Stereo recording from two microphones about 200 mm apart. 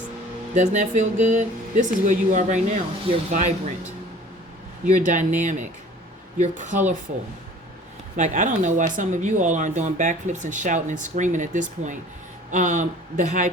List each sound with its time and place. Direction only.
0.5 s speech: 35° right (ahead or behind)
4.9 s speech: 40° right (ahead or behind)
8.1 s speech: 40° right (ahead or behind)